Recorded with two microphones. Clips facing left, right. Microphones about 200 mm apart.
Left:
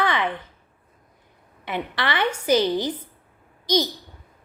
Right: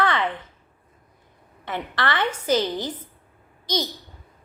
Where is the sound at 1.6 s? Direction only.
15° left (ahead or behind).